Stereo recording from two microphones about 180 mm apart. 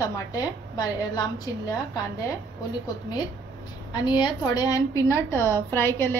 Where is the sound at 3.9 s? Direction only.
25° left (ahead or behind).